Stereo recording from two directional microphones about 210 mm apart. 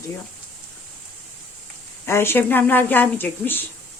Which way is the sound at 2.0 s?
10° left (ahead or behind).